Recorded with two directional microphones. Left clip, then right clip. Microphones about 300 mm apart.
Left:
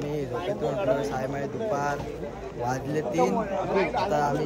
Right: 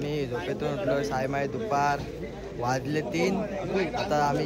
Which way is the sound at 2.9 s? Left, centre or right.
Centre.